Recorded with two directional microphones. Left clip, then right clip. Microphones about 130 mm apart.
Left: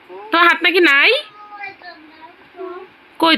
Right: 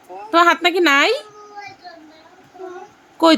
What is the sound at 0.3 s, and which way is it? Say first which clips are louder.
A woman's voice: left 1 dB; 15° right (ahead or behind).